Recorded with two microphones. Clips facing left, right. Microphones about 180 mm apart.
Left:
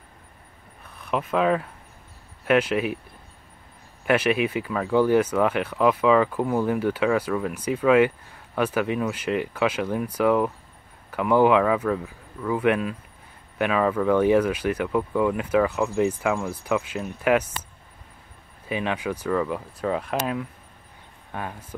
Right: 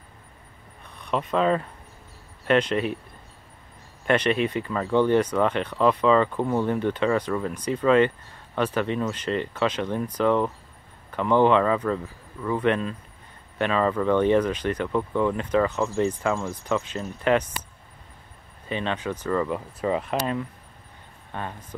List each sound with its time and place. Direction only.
0.8 s speech: 5° left (ahead or behind)
4.0 s speech: 5° left (ahead or behind)
18.7 s speech: 10° left (ahead or behind)
21.3 s speech: 10° left (ahead or behind)